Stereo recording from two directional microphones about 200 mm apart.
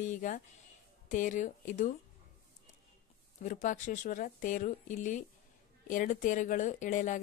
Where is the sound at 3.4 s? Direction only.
40° left (ahead or behind).